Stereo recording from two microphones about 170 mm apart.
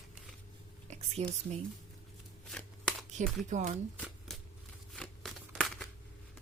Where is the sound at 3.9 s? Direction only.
5° right (ahead or behind).